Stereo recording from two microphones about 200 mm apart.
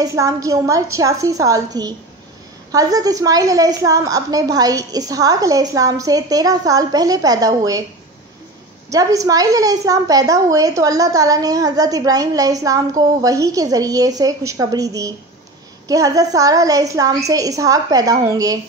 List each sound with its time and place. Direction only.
0.0 s a woman's voice: 15° right (ahead or behind)
8.9 s a woman's voice: 15° right (ahead or behind)